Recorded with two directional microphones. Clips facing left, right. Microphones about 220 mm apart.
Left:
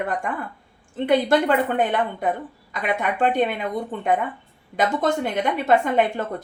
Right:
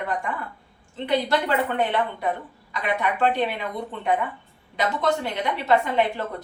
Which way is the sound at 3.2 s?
50° left (ahead or behind).